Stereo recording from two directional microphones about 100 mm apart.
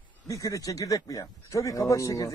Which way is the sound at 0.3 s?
35° left (ahead or behind).